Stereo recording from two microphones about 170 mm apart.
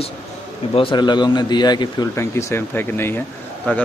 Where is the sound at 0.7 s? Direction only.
30° left (ahead or behind).